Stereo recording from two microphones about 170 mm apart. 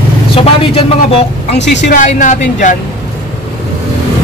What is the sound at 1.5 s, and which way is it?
Speech, 90° left.